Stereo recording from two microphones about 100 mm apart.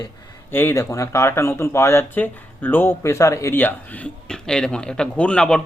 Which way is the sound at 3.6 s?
15° left (ahead or behind).